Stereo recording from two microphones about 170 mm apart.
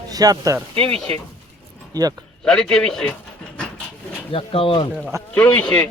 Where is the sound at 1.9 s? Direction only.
20° right (ahead or behind).